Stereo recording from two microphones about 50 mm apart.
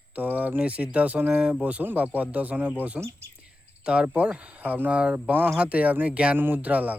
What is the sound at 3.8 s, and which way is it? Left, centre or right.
Speech, right.